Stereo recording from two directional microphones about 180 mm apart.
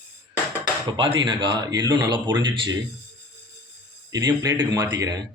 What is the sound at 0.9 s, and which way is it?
Speech, 25° right (ahead or behind).